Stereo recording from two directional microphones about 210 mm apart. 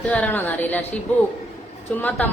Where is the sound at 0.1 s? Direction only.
5° left (ahead or behind).